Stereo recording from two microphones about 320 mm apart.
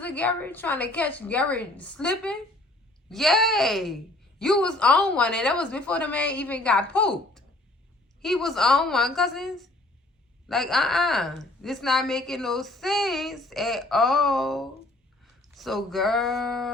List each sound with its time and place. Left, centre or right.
0.0 s speech: centre